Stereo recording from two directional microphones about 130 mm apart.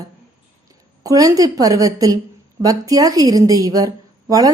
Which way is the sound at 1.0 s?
30° right (ahead or behind).